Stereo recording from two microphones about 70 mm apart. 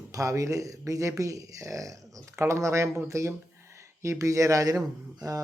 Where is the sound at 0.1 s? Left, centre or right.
Right.